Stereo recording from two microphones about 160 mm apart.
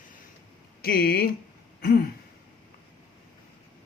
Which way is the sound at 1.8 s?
70° left (ahead or behind).